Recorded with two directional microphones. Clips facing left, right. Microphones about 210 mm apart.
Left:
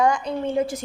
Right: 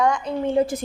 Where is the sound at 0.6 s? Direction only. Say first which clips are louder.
Right 4 dB; 30° right (ahead or behind).